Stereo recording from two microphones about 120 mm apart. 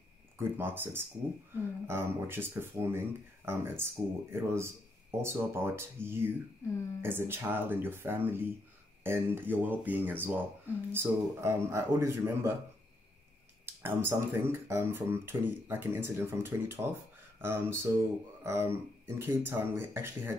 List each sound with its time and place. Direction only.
0.4 s speech: 20° right (ahead or behind)
13.7 s speech: 20° right (ahead or behind)